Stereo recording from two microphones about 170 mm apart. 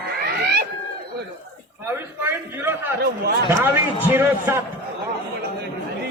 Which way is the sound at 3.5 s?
15° right (ahead or behind).